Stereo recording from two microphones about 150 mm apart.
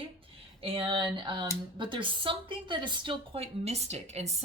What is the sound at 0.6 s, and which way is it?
A woman's voice, 35° right (ahead or behind).